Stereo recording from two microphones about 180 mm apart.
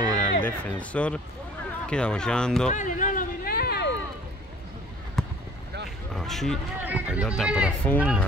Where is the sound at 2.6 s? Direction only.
45° left (ahead or behind).